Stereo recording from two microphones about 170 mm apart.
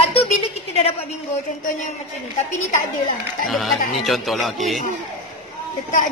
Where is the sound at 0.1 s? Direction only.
35° left (ahead or behind).